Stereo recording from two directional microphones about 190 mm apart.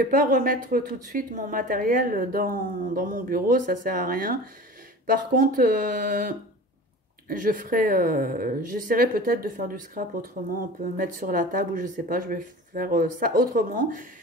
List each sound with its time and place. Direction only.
0.0 s speech: 45° right (ahead or behind)